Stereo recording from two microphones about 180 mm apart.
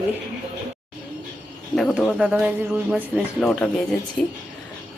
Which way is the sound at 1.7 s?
Centre (ahead or behind).